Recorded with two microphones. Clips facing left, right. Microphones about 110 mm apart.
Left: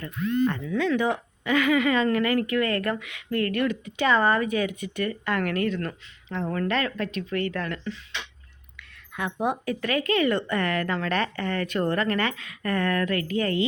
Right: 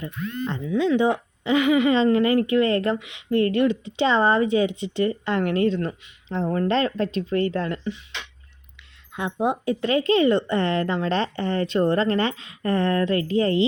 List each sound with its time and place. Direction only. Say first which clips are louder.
0.0 s speech: left 5 dB; 20° right (ahead or behind)
9.1 s speech: right 3 dB; 20° right (ahead or behind)